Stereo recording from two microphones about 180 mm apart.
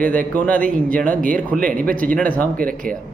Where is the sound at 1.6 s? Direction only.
50° right (ahead or behind).